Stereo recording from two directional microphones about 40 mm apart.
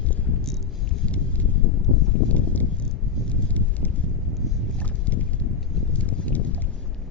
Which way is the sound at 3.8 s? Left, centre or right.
Left.